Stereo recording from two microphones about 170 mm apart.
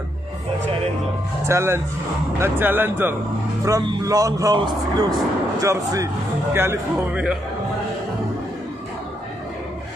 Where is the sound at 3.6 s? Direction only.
25° right (ahead or behind); by 7.4 s 10° right (ahead or behind).